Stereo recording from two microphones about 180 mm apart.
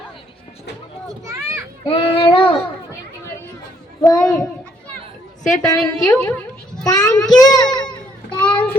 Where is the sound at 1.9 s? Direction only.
30° left (ahead or behind).